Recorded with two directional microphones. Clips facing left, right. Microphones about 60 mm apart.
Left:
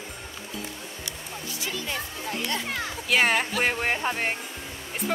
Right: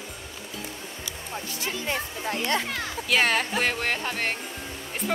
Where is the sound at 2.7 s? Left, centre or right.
Centre.